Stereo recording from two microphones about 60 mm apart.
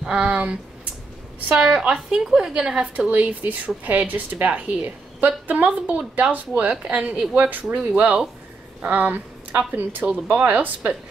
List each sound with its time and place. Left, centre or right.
0.0 s a woman's voice: centre